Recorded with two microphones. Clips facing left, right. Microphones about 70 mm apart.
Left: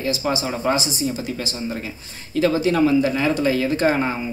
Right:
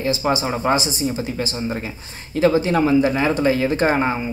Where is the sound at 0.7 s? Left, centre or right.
Right.